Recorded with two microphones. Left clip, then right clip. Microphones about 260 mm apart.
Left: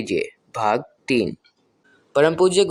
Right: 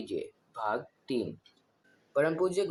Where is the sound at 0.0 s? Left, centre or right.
Left.